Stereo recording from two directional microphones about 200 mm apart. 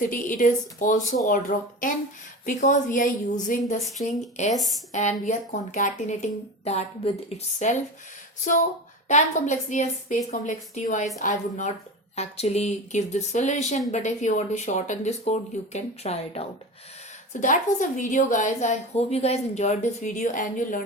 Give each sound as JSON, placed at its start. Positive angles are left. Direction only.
{"t": 0.0, "sound": "a woman's voice", "side_deg": 40}
{"t": 4.5, "sound": "speech", "side_deg": 0}
{"t": 4.9, "sound": "a woman's voice", "side_deg": 35}
{"t": 9.0, "sound": "a woman's voice", "side_deg": 35}